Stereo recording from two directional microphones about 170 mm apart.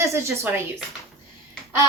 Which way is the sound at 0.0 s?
15° right (ahead or behind).